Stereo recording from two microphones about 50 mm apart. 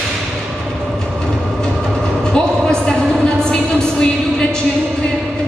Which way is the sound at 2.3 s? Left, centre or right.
Centre.